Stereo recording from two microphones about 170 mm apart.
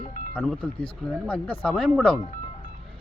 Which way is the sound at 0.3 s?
5° left (ahead or behind).